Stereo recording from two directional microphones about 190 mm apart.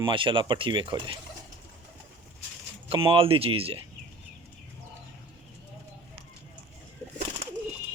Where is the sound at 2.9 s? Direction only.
30° right (ahead or behind).